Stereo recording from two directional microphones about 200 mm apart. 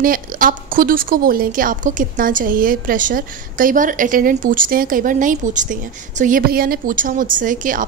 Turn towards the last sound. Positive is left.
turn(degrees=-40)  # may be behind; listen again after turning